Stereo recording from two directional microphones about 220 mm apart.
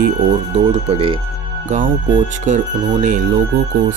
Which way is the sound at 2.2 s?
35° right (ahead or behind).